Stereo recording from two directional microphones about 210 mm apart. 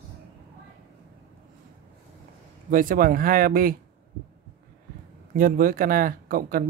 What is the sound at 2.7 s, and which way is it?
Speech, 40° right (ahead or behind).